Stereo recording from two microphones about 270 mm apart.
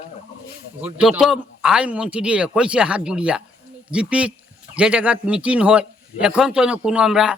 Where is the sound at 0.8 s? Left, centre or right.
Centre.